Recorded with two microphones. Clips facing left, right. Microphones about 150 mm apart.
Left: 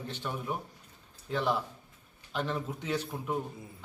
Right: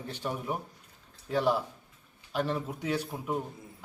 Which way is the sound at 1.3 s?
10° right (ahead or behind).